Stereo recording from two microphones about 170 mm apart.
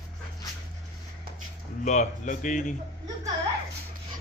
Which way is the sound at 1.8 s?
45° left (ahead or behind).